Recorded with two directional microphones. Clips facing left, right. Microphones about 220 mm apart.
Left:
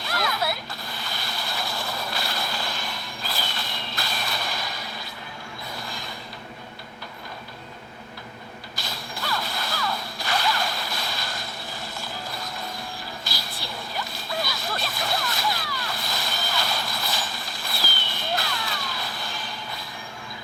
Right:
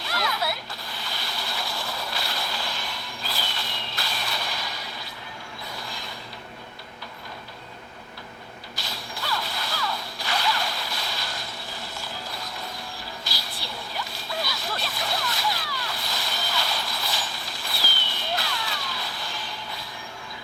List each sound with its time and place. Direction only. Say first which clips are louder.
0.0 s a sound: left 1 dB; 50° left (ahead or behind)
0.9 s vehicle: even; 50° left (ahead or behind)
8.9 s whip: left 1 dB; 50° left (ahead or behind)
13.9 s splash: left 2 dB; 50° left (ahead or behind)
17.9 s fireworks: left 2 dB; 50° left (ahead or behind)